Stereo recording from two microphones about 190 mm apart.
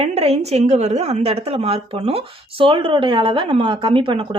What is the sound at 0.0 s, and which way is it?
A woman's voice, 30° right (ahead or behind).